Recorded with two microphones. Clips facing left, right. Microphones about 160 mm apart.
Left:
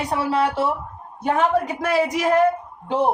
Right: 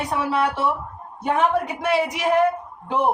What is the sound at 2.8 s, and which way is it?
Speech, 30° left (ahead or behind).